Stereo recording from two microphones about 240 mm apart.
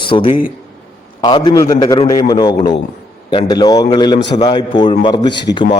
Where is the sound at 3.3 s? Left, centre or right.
Centre.